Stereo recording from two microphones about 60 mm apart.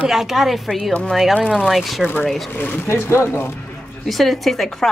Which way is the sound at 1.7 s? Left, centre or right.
Centre.